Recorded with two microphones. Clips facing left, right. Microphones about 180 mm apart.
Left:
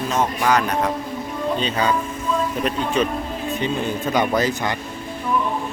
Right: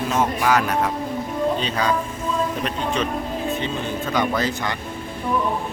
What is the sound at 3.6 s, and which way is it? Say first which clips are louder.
Speech: left 3 dB; 20° left (ahead or behind).